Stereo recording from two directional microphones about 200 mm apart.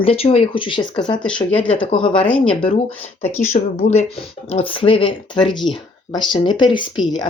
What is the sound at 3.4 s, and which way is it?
Speech, 35° left (ahead or behind).